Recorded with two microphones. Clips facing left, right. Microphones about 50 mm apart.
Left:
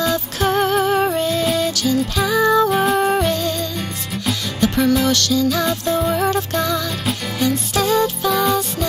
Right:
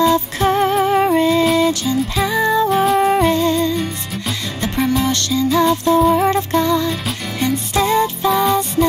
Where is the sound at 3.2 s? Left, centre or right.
Right.